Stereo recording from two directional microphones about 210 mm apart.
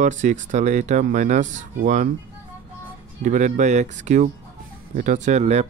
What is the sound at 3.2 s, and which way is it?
Speech, 35° right (ahead or behind).